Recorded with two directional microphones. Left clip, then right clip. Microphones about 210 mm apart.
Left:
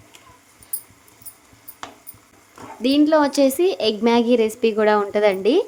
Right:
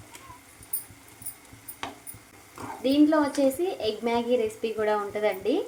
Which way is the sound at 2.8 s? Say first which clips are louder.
Left 6 dB; 45° left (ahead or behind).